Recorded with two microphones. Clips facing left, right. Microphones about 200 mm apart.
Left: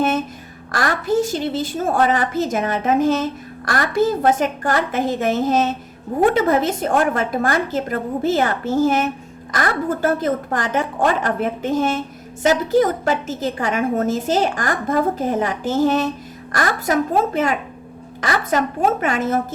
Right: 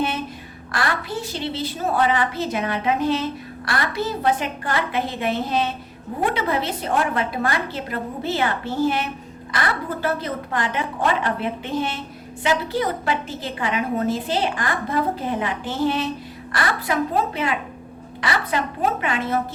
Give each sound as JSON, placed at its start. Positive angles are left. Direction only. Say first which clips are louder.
{"t": 0.7, "sound": "a woman's voice", "louder": "left 6 dB", "side_deg": 45}